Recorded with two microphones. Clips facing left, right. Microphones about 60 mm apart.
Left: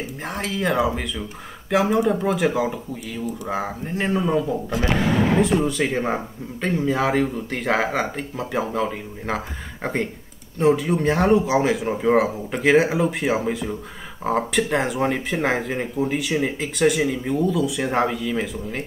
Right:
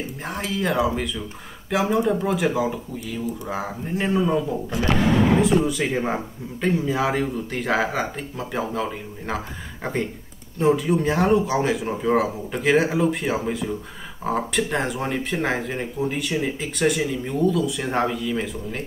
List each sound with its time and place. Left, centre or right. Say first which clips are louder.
0.2 s a man's voice: left 1 dB; centre
5.4 s speech: even; centre
10.6 s speech: left 1 dB; centre